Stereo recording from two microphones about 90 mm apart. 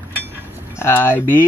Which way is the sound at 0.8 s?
25° left (ahead or behind).